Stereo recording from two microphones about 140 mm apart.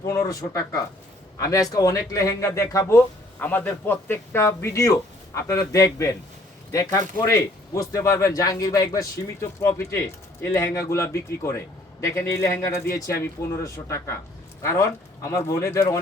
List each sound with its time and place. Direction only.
0.0 s a man's voice: 25° left (ahead or behind)